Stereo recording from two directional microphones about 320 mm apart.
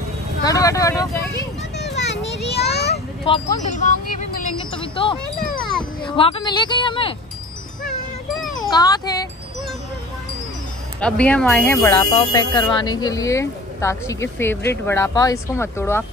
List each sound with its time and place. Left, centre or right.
0.4 s vehicle: centre
2.9 s a sound: centre
3.7 s speech: left
5.6 s wind chime: centre
6.0 s speech: centre
8.5 s a child's voice: centre
11.0 s speech: centre